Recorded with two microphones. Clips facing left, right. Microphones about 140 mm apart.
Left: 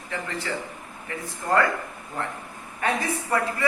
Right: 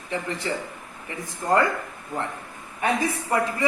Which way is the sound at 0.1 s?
20° right (ahead or behind).